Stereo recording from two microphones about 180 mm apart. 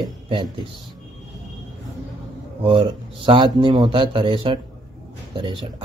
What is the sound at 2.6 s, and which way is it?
Speech, 30° right (ahead or behind).